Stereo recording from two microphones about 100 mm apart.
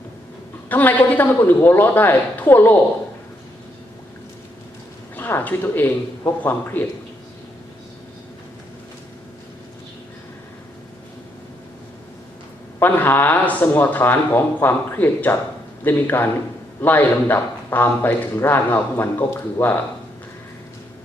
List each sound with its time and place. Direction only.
0.7 s a man's voice: 15° left (ahead or behind)
5.1 s a man's voice: 20° left (ahead or behind)
12.8 s a man's voice: 20° left (ahead or behind)